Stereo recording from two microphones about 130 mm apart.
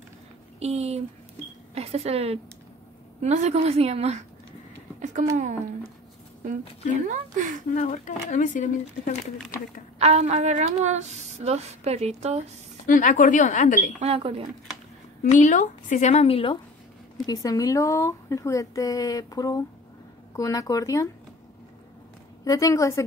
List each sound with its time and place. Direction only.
0.6 s speech: 55° right (ahead or behind)
3.2 s speech: 60° right (ahead or behind)
5.0 s speech: 70° right (ahead or behind)
7.1 s speech: 85° right
7.7 s speech: 70° left (ahead or behind)
9.9 s speech: 55° right (ahead or behind)
12.8 s speech: 85° left
13.9 s speech: 50° right (ahead or behind)
15.3 s speech: 70° left (ahead or behind); by 16.5 s 45° left (ahead or behind)
17.3 s speech: 25° left (ahead or behind)
22.4 s speech: 25° left (ahead or behind)